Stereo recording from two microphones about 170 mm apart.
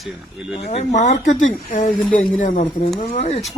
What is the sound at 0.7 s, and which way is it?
Speech, 40° left (ahead or behind).